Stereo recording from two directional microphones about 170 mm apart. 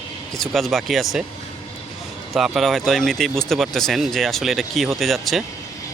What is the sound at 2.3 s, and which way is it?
Speech, centre (ahead or behind).